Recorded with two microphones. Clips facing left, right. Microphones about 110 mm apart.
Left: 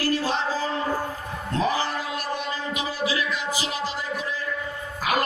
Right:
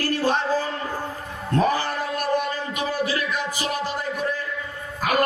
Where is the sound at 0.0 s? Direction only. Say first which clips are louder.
Right 2 dB; 55° right (ahead or behind).